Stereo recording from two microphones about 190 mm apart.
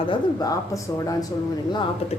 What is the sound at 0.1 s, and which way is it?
A woman's voice, 20° left (ahead or behind).